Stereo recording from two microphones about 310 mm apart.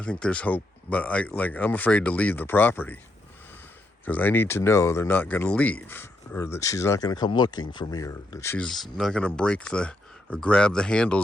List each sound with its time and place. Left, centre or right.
0.0 s speech: centre
4.0 s speech: centre